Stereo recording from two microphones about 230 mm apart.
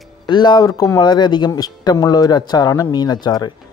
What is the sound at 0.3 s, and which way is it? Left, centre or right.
Speech, centre.